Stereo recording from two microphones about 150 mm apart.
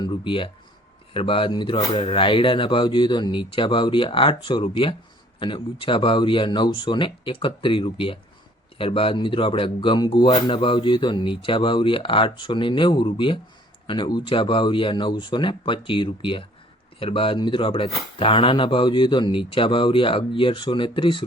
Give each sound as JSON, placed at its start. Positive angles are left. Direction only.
{"t": 0.0, "sound": "speech", "side_deg": 35}